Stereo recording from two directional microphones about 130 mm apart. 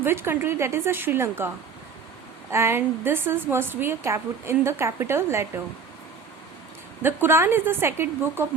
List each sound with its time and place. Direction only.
0.0 s a woman's voice: 20° right (ahead or behind)
2.5 s a woman's voice: 20° right (ahead or behind)
7.0 s a woman's voice: 20° right (ahead or behind)